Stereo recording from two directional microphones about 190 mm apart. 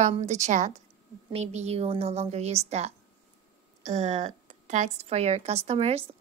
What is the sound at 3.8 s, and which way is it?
A woman's voice, 40° right (ahead or behind).